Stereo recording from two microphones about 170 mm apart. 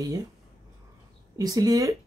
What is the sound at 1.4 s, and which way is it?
Speech, 20° right (ahead or behind).